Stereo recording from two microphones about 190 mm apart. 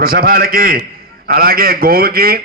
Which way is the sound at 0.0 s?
50° right (ahead or behind).